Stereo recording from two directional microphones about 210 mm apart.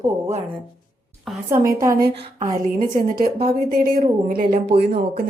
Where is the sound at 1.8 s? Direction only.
15° right (ahead or behind).